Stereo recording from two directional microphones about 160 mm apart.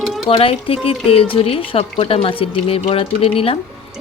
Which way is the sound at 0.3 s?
35° left (ahead or behind).